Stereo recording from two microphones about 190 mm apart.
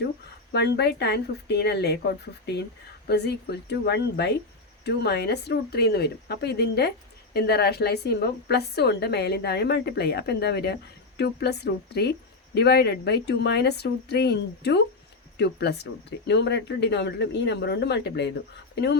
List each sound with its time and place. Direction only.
0.5 s a woman's voice: 60° left (ahead or behind)